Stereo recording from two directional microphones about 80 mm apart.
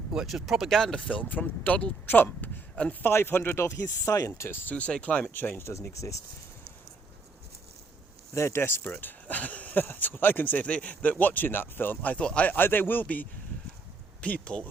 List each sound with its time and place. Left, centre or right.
0.1 s speech: centre
1.0 s speech: centre
3.1 s speech: left
4.3 s speech: left
4.7 s speech: centre; by 6.2 s left
8.3 s speech: left; by 14.6 s centre